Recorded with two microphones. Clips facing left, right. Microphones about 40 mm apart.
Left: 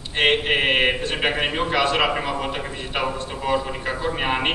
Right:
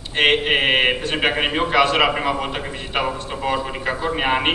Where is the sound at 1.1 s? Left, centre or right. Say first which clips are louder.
Right 3 dB; centre.